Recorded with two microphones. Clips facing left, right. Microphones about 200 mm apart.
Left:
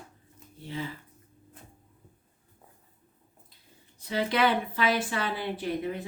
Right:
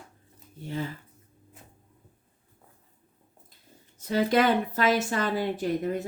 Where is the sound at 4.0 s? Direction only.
45° right (ahead or behind).